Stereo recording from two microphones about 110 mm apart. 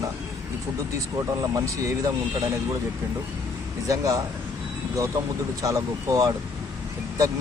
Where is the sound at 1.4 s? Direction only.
30° right (ahead or behind).